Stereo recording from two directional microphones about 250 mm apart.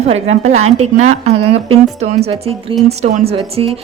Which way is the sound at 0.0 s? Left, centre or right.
Right.